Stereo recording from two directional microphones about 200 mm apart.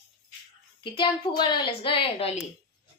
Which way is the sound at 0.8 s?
25° left (ahead or behind).